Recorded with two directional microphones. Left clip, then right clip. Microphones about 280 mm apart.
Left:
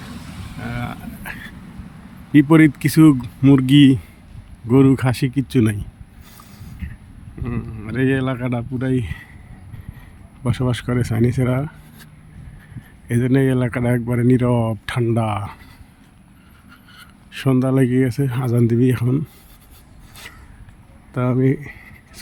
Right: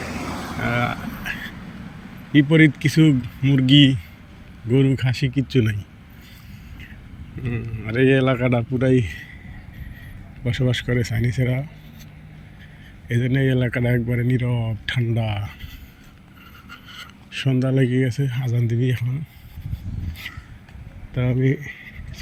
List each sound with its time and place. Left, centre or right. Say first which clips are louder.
0.6 s speech: right 7 dB; centre
7.4 s speech: left 1 dB; centre
10.4 s speech: left 1 dB; centre
13.1 s speech: left 4 dB; centre
16.9 s speech: right 3 dB; centre
21.1 s a sound: left 4 dB; centre